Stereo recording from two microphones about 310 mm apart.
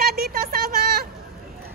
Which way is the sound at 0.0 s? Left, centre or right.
Right.